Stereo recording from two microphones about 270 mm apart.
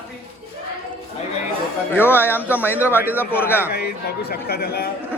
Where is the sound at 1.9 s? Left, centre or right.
Centre.